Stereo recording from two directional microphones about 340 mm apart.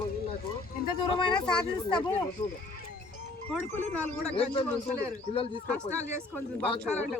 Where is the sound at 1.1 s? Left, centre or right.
Centre.